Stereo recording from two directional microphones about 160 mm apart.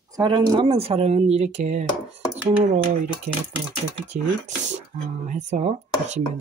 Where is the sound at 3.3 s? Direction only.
45° right (ahead or behind).